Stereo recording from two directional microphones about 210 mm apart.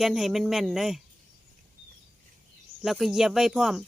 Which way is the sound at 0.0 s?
Centre (ahead or behind).